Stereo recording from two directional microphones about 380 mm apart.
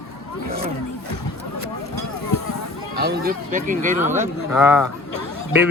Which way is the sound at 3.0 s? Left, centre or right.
Right.